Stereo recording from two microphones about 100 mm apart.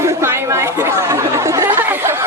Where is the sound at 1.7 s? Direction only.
25° right (ahead or behind).